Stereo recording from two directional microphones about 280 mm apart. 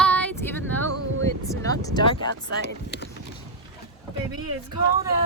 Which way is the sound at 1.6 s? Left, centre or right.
Centre.